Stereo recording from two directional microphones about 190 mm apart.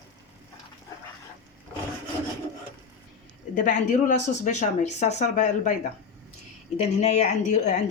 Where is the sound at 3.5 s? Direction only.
45° left (ahead or behind).